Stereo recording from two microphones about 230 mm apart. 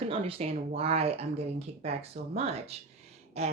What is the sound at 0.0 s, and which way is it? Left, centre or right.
Speech, right.